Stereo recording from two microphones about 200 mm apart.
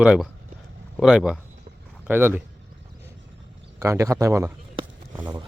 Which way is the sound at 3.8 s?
15° right (ahead or behind).